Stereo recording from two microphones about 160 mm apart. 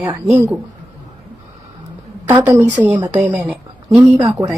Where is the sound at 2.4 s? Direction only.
10° right (ahead or behind).